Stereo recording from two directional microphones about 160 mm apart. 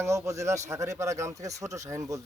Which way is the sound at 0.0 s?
20° right (ahead or behind).